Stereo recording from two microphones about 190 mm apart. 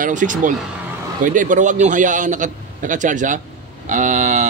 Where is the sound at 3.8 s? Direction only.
40° right (ahead or behind).